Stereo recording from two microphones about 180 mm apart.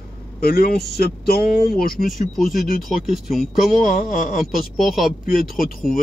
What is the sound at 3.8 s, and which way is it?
Speech, 45° left (ahead or behind).